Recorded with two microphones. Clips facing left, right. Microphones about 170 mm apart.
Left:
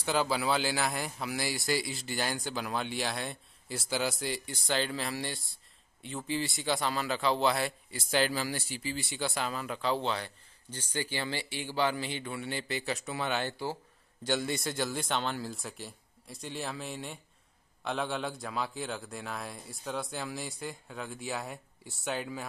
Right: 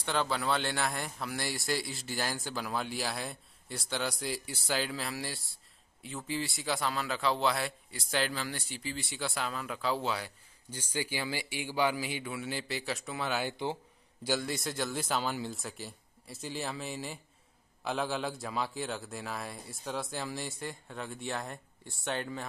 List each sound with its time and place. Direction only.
0.0 s a man's voice: 5° left (ahead or behind)
13.5 s speech: 20° right (ahead or behind)
14.2 s a man's voice: centre (ahead or behind)